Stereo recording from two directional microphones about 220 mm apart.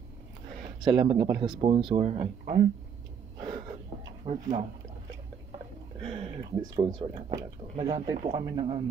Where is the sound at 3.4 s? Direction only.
20° right (ahead or behind).